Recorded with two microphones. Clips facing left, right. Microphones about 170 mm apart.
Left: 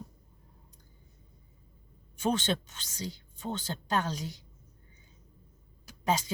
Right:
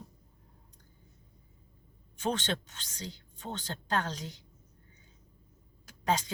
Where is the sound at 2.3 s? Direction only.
10° left (ahead or behind).